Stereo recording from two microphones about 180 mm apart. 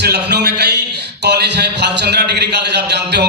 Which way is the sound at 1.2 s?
70° right (ahead or behind).